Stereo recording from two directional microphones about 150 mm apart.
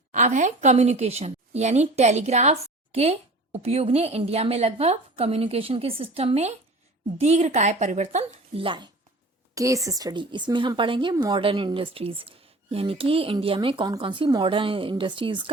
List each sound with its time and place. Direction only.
0.1 s a woman's voice: 55° right (ahead or behind); by 8.9 s 35° right (ahead or behind)
9.6 s speech: 20° right (ahead or behind)